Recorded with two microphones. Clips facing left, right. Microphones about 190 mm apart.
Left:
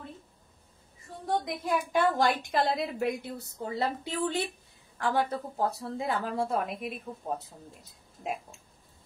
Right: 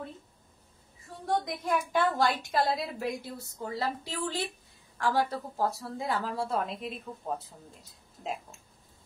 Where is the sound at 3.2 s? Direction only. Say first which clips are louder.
Left 2 dB; 20° left (ahead or behind).